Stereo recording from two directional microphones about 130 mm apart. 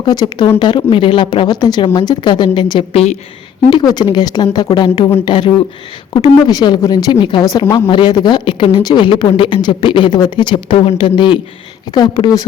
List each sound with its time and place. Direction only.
0.0 s a woman's voice: 30° left (ahead or behind)
2.9 s a woman's voice: 55° left (ahead or behind)
3.7 s a woman's voice: 35° left (ahead or behind)